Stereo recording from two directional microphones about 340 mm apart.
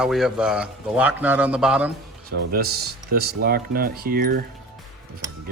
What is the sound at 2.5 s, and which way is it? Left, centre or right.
Speech, right.